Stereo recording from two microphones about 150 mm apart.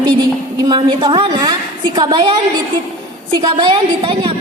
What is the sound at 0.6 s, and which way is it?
A woman's voice, 30° right (ahead or behind).